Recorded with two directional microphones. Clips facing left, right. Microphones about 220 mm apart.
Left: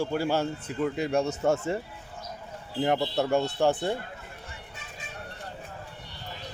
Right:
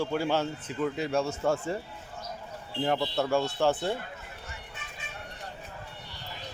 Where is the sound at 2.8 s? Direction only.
20° left (ahead or behind).